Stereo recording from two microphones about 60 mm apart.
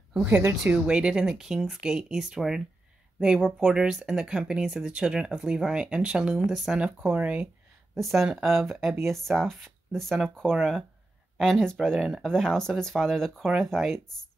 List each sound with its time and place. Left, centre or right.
0.2 s speech: right
0.7 s speech: centre
7.1 s speech: right
7.9 s speech: centre
12.0 s speech: centre
12.3 s speech: centre